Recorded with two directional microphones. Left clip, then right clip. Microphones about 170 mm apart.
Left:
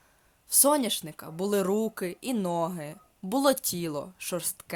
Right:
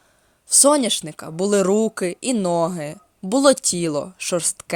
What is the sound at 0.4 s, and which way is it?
A man's voice, 30° right (ahead or behind).